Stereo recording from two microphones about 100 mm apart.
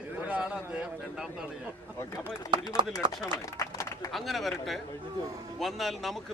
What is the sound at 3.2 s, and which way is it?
Speech, 35° left (ahead or behind).